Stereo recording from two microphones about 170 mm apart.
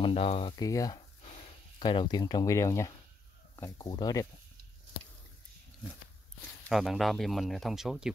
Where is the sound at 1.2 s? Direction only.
35° left (ahead or behind).